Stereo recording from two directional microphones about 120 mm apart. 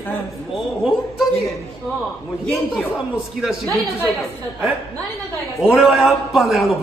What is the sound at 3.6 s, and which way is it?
Speech, 25° right (ahead or behind).